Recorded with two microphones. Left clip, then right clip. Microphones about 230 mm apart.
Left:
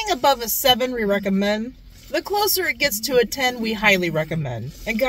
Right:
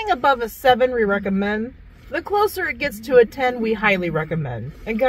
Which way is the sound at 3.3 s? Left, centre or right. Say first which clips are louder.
Right 2 dB; left.